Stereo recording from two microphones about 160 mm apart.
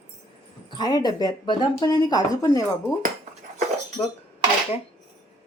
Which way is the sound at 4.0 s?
25° left (ahead or behind).